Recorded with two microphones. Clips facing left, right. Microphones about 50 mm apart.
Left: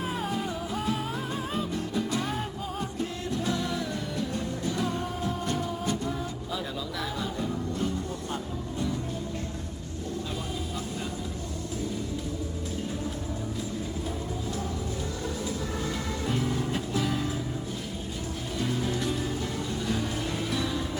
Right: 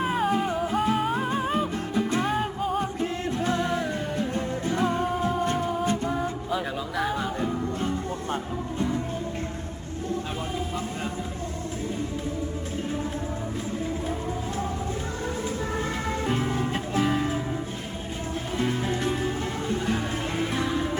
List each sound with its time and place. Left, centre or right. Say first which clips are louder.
0.0 s music: right 7 dB; centre
0.3 s music: right 7 dB; right
2.3 s music: right 7 dB; centre
3.0 s music: right 4 dB; right
16.2 s music: right 2 dB; right
18.5 s music: right 3 dB; right